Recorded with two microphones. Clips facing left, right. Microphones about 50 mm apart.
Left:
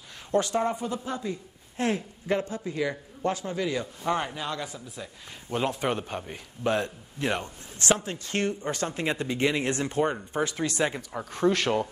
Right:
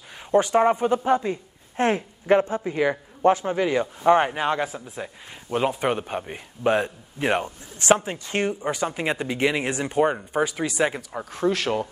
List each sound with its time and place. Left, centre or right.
0.3 s speech: right
0.6 s speech: right; by 11.9 s centre